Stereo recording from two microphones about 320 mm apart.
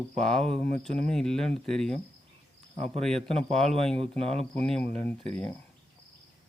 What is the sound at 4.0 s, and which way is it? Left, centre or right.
Speech, centre.